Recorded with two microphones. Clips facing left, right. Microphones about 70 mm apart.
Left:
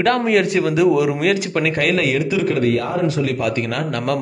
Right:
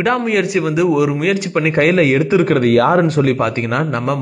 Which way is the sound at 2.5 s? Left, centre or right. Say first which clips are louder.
Right 7 dB; right.